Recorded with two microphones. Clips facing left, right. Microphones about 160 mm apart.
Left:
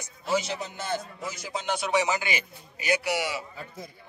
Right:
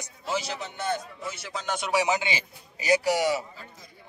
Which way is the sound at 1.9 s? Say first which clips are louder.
Right 2 dB; 20° right (ahead or behind).